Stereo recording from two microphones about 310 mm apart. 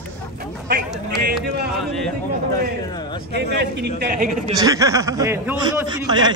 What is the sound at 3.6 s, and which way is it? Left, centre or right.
Speech, right.